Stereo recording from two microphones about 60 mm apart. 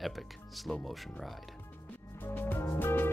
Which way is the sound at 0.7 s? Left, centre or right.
Centre.